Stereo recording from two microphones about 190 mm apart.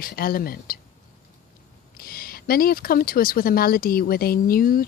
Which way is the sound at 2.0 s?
50° left (ahead or behind).